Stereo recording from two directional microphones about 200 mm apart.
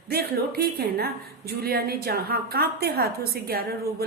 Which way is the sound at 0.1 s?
50° right (ahead or behind).